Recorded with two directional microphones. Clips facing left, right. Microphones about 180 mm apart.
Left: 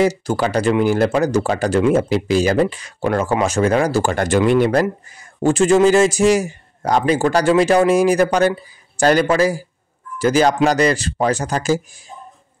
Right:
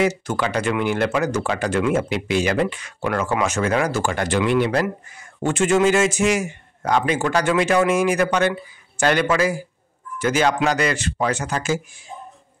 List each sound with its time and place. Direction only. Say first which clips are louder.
0.0 s speech: left 4 dB; 35° left (ahead or behind)
5.4 s speech: left 5 dB; 35° left (ahead or behind)